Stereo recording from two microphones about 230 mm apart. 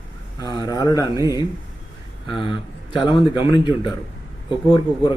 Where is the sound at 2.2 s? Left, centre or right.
Left.